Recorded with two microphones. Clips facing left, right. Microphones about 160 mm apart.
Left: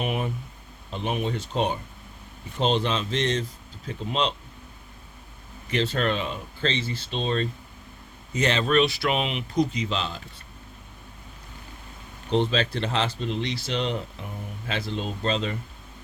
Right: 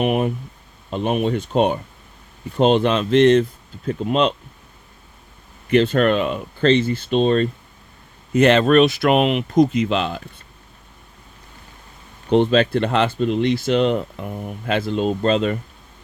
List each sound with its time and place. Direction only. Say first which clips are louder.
0.0 s speech: right 9 dB; 60° right (ahead or behind)
5.7 s speech: right 9 dB; 55° right (ahead or behind)
12.3 s speech: right 8 dB; 55° right (ahead or behind)